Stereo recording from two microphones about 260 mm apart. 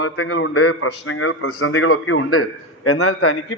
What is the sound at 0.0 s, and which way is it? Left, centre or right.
A man's voice, left.